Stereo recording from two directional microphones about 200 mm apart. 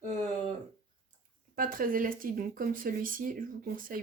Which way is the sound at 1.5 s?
45° right (ahead or behind).